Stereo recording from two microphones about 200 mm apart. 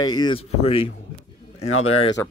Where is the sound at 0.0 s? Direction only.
20° left (ahead or behind).